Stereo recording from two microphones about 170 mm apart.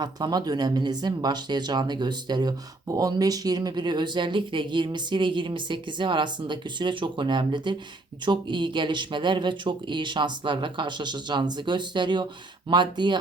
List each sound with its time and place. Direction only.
0.0 s speech: 25° right (ahead or behind)